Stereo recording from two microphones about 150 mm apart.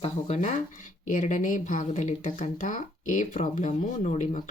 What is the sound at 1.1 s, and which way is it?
Speech, 60° left (ahead or behind).